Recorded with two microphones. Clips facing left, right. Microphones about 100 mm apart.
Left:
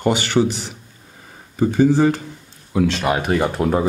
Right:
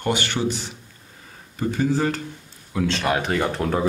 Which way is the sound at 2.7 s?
15° left (ahead or behind).